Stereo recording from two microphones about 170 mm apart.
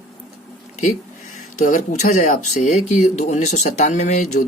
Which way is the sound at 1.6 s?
45° left (ahead or behind).